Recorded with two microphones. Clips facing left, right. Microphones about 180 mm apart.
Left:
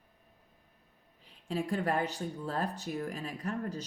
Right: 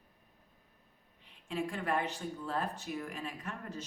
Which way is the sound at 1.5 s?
40° left (ahead or behind).